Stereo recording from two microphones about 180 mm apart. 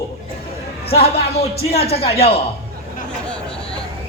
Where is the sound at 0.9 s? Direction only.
35° left (ahead or behind).